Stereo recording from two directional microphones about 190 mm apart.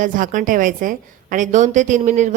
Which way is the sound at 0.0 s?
45° right (ahead or behind).